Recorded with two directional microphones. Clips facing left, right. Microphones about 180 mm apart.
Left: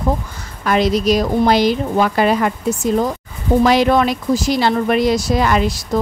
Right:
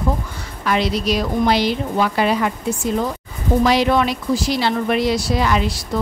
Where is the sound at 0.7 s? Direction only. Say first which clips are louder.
Left 4 dB; 45° left (ahead or behind).